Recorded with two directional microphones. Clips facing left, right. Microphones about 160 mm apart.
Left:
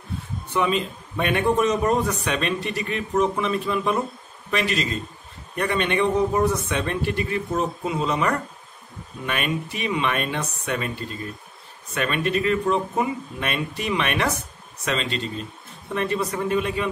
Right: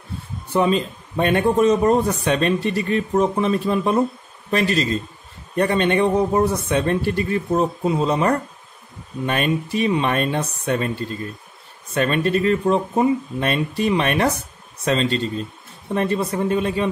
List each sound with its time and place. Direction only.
0.5 s a man's voice: 35° right (ahead or behind)
11.9 s a man's voice: 35° right (ahead or behind)